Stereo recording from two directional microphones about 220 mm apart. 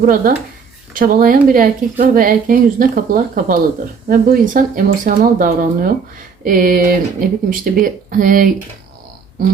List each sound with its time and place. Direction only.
0.0 s speech: 40° right (ahead or behind)